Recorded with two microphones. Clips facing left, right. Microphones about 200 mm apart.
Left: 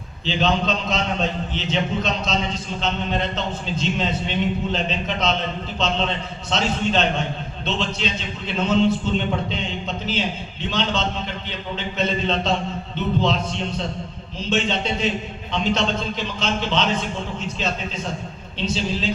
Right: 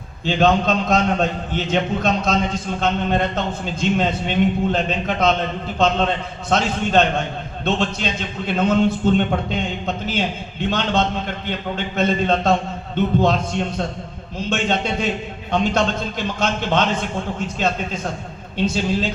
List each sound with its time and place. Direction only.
0.3 s a man's voice: 50° right (ahead or behind)
18.5 s a man's voice: 50° right (ahead or behind)